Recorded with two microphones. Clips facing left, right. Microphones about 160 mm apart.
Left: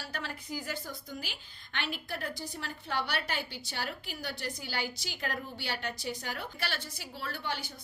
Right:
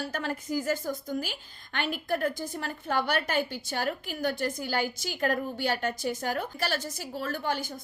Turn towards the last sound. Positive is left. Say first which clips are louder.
# right 7 dB
turn(degrees=-45)  # may be behind; listen again after turning